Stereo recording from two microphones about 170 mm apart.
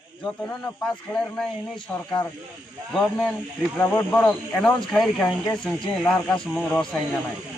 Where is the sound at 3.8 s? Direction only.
10° left (ahead or behind).